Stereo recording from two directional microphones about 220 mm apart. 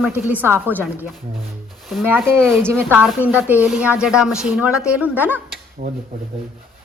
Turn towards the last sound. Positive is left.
turn(degrees=-45)  # may be behind; listen again after turning